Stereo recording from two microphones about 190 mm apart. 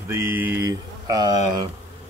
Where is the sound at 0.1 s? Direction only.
10° right (ahead or behind).